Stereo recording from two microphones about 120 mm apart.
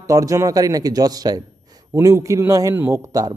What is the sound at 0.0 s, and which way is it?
A man's voice, 25° right (ahead or behind).